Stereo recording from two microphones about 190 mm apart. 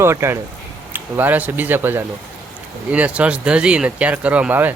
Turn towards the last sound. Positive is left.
turn(degrees=-10)  # may be behind; listen again after turning